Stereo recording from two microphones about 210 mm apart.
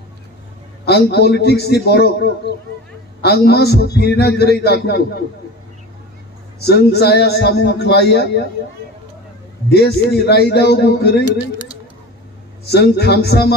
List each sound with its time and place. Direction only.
0.8 s a man's voice: 50° left (ahead or behind)
6.6 s a man's voice: 50° left (ahead or behind)
9.7 s a man's voice: 50° left (ahead or behind)
12.6 s a man's voice: 50° left (ahead or behind)